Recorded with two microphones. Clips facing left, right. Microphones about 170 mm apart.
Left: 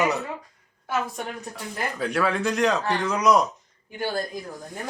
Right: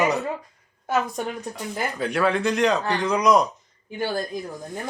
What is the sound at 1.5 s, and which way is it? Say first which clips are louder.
Speech: right 2 dB; centre (ahead or behind).